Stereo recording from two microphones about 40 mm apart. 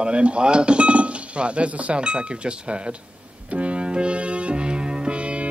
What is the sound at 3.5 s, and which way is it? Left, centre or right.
Music, right.